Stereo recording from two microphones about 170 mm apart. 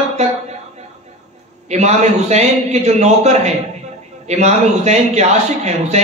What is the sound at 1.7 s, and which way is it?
A man's voice, 40° right (ahead or behind).